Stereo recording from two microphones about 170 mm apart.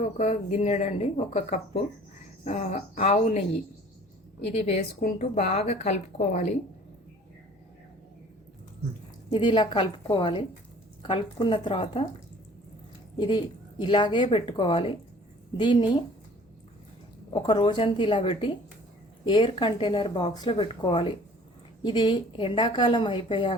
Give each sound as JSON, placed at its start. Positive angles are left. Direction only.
{"t": 0.2, "sound": "speech", "side_deg": 40}
{"t": 4.5, "sound": "speech", "side_deg": 40}
{"t": 4.9, "sound": "speech", "side_deg": 60}
{"t": 5.2, "sound": "speech", "side_deg": 40}
{"t": 9.3, "sound": "speech", "side_deg": 25}
{"t": 13.1, "sound": "speech", "side_deg": 25}
{"t": 17.3, "sound": "speech", "side_deg": 30}